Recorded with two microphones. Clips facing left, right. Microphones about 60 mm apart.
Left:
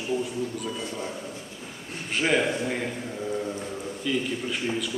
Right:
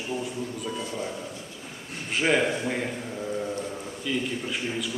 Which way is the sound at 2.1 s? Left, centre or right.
Centre.